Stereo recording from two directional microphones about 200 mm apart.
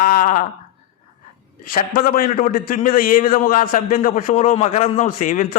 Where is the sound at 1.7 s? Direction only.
45° left (ahead or behind).